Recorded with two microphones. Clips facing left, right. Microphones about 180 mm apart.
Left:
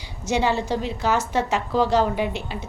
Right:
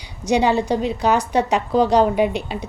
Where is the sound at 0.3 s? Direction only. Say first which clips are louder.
Right 5 dB; 15° right (ahead or behind).